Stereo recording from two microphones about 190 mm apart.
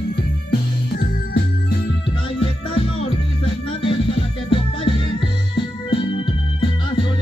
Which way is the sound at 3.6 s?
30° left (ahead or behind).